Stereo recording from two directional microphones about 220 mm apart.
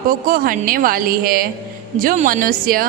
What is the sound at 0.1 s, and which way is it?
A woman's voice, 40° right (ahead or behind).